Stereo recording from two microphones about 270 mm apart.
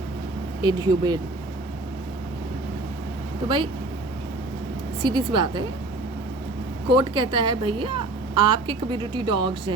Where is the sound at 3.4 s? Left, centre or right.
Centre.